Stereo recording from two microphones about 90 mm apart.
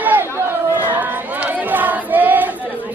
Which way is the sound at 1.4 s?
20° right (ahead or behind).